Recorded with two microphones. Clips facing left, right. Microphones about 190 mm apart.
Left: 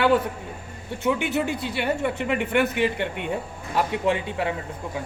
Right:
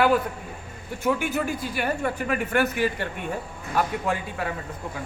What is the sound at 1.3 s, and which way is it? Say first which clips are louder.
Speech: left 2 dB; 75° left (ahead or behind).